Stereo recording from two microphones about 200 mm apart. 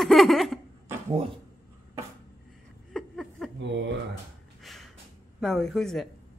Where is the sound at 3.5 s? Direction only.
65° right (ahead or behind).